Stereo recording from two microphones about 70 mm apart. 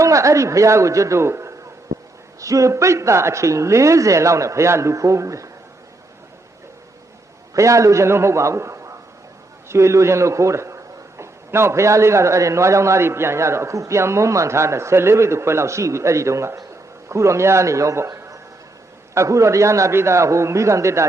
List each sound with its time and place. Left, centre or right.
0.0 s a man's voice: right
7.5 s a man's voice: right